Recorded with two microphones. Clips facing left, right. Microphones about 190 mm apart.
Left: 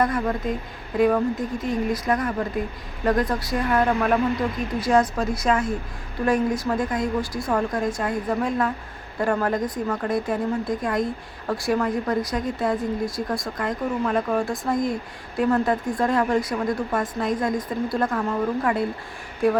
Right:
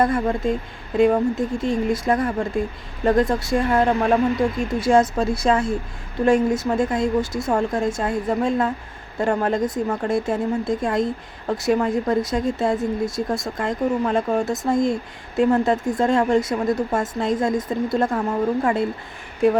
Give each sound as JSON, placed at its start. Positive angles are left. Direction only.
{"t": 0.0, "sound": "speech", "side_deg": -30}